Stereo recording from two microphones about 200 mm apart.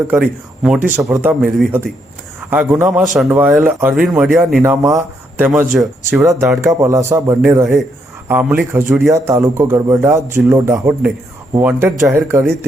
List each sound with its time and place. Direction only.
0.1 s a man's voice: 5° right (ahead or behind)
6.1 s a man's voice: 15° right (ahead or behind)